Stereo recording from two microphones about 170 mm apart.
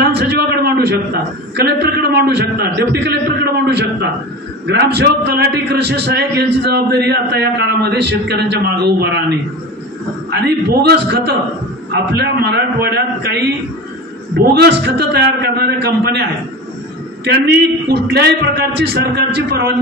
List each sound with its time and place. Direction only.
0.0 s a sound: 80° right
1.6 s a man's voice: 70° right (ahead or behind)
10.3 s a man's voice: 70° right (ahead or behind)